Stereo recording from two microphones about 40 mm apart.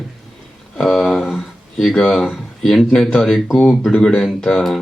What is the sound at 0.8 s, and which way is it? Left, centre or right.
Speech, centre.